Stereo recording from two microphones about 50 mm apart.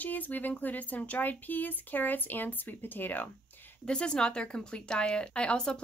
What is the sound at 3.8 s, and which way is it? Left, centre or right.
Speech, centre.